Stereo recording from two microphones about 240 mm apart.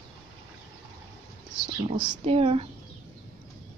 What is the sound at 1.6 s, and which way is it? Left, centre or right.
Speech, centre.